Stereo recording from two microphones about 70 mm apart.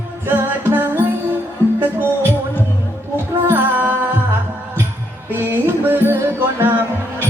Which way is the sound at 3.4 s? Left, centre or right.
Right.